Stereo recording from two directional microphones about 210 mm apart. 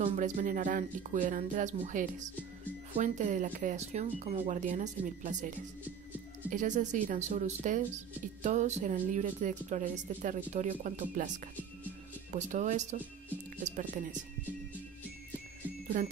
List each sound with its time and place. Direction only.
0.0 s speech: 35° right (ahead or behind)
6.5 s speech: 35° right (ahead or behind)
12.3 s speech: 35° right (ahead or behind)